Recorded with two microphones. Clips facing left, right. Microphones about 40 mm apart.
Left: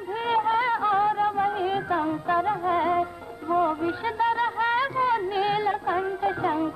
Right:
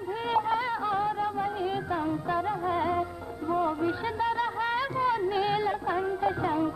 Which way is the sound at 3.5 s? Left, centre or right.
Left.